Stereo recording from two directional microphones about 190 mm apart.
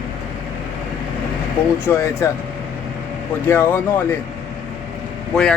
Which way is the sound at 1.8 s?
15° left (ahead or behind).